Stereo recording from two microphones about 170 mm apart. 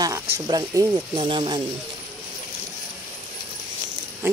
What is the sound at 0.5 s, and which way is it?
Speech, 25° right (ahead or behind).